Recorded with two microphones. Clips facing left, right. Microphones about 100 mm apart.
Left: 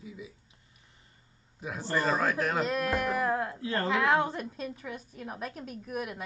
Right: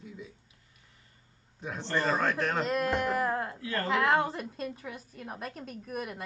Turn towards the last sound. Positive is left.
turn(degrees=5)  # may be behind; listen again after turning